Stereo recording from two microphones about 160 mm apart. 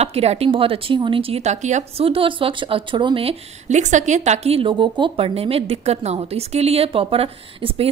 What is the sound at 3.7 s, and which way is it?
Speech, 50° right (ahead or behind).